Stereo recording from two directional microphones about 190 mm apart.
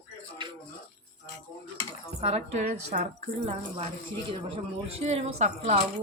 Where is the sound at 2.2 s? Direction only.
35° right (ahead or behind).